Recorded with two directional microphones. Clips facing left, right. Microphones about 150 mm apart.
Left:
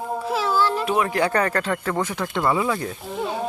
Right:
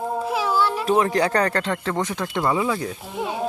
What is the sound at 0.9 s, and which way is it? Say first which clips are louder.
Speech: right 2 dB; 30° right (ahead or behind).